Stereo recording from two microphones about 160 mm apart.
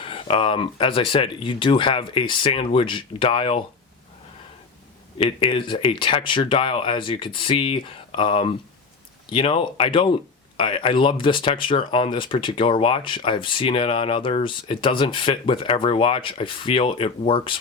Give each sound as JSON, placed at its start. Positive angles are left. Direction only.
{"t": 0.0, "sound": "speech", "side_deg": 35}
{"t": 5.1, "sound": "speech", "side_deg": 30}